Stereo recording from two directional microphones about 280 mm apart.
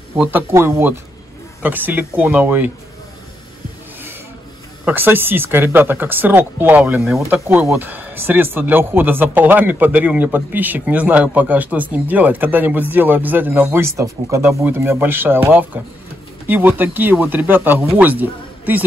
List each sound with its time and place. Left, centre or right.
0.2 s speech: centre
4.8 s speech: centre